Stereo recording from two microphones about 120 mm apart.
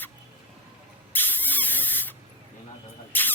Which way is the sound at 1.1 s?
15° left (ahead or behind).